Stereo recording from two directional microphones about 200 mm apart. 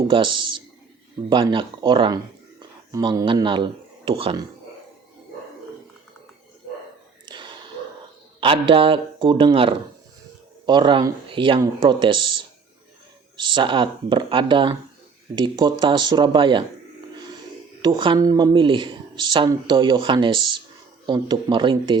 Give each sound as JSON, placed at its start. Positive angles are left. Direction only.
{"t": 0.1, "sound": "speech", "side_deg": -25}
{"t": 7.3, "sound": "gasp", "side_deg": -25}
{"t": 8.4, "sound": "speech", "side_deg": -25}
{"t": 17.8, "sound": "speech", "side_deg": -25}